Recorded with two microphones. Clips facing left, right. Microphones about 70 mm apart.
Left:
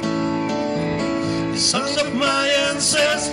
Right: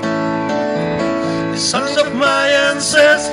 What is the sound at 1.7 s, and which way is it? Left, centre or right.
Music, right.